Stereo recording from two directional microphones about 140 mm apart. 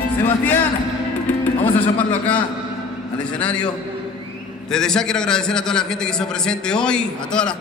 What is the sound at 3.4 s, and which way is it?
Speech, 10° left (ahead or behind).